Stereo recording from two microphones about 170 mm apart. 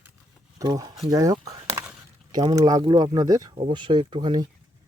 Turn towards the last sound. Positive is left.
turn(degrees=-25)  # may be behind; listen again after turning